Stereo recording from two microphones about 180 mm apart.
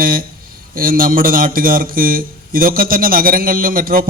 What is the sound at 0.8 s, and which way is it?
A man's voice, 55° right (ahead or behind).